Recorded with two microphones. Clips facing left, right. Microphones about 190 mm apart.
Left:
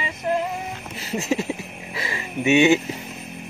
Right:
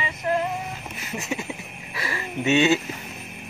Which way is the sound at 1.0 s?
30° left (ahead or behind).